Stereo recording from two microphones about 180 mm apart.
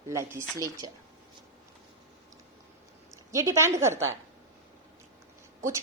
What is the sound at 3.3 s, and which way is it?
Speech, 15° right (ahead or behind).